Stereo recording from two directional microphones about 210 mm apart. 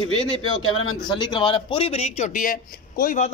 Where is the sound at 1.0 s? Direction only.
20° left (ahead or behind).